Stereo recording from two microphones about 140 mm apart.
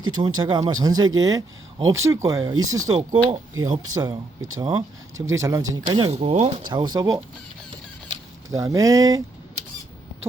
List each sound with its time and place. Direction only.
0.2 s speech: 30° right (ahead or behind)
5.8 s speech: 35° right (ahead or behind)
8.4 s speech: 25° right (ahead or behind)